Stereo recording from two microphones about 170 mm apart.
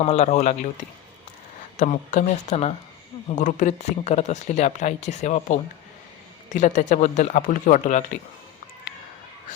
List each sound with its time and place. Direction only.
0.0 s speech: 40° left (ahead or behind)
1.7 s speech: 45° left (ahead or behind)